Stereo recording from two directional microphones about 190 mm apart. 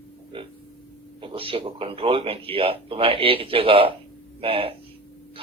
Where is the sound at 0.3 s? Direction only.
25° right (ahead or behind).